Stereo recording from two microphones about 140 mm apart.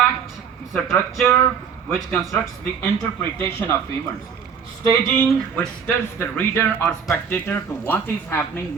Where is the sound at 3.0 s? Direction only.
20° left (ahead or behind).